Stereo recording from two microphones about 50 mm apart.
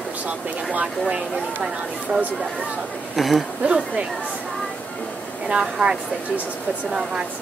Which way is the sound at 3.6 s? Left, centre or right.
Right.